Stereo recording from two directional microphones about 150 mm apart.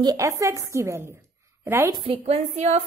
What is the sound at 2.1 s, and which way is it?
Speech, 45° right (ahead or behind).